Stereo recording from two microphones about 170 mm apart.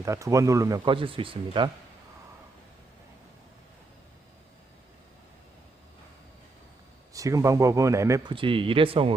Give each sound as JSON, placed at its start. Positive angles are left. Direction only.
{"t": 0.0, "sound": "speech", "side_deg": -20}
{"t": 0.9, "sound": "speech", "side_deg": -30}
{"t": 7.1, "sound": "speech", "side_deg": -20}
{"t": 8.3, "sound": "speech", "side_deg": -30}